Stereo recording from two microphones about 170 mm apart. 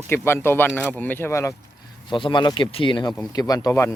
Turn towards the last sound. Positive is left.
turn(degrees=20)  # may be behind; listen again after turning